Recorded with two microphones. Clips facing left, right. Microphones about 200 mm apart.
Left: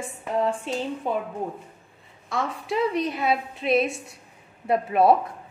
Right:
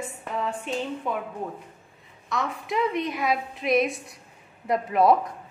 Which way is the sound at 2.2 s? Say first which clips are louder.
Left 1 dB; 30° left (ahead or behind).